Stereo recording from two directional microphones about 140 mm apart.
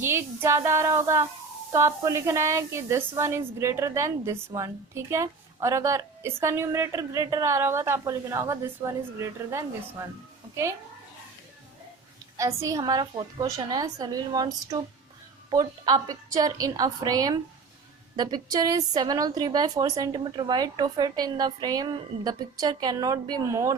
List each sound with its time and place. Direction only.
0.0 s a woman's voice: 15° right (ahead or behind)
12.4 s a woman's voice: 25° right (ahead or behind)